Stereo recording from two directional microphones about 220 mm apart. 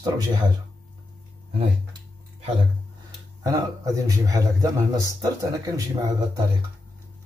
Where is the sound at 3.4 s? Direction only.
15° right (ahead or behind).